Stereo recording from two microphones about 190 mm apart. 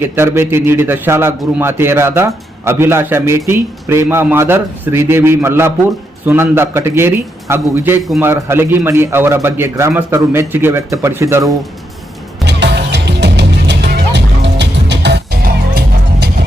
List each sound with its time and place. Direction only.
0.0 s a man's voice: 10° right (ahead or behind)
12.5 s music: 65° right (ahead or behind)